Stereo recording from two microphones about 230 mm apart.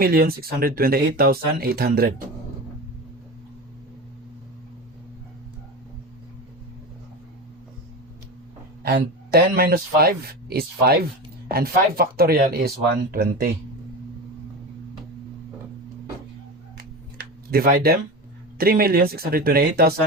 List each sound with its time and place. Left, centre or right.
0.0 s speech: right
8.8 s speech: right
16.7 s a sound: right
18.5 s speech: right